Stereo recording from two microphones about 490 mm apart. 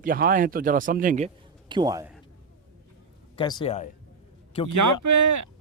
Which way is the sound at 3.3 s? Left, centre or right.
Centre.